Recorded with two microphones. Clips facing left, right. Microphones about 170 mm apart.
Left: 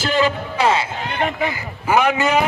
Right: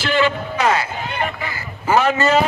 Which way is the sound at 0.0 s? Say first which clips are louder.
Even; 40° left (ahead or behind).